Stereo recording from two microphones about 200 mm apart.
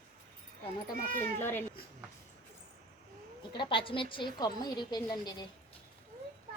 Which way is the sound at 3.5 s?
25° left (ahead or behind).